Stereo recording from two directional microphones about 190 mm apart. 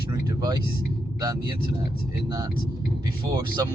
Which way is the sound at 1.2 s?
20° right (ahead or behind).